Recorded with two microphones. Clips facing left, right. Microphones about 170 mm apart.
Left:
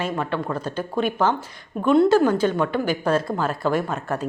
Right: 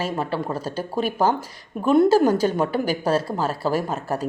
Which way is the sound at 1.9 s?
40° right (ahead or behind).